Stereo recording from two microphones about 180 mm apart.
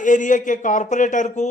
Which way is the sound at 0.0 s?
45° left (ahead or behind).